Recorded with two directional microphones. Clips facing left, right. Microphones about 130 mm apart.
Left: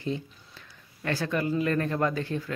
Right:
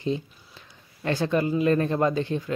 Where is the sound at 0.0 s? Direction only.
20° right (ahead or behind).